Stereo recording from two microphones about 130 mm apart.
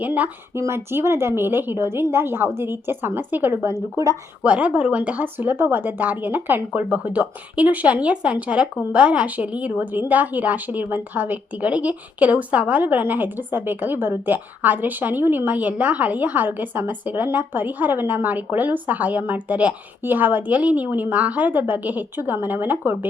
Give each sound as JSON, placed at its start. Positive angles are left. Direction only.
{"t": 0.0, "sound": "speech", "side_deg": -15}
{"t": 4.4, "sound": "speech", "side_deg": -10}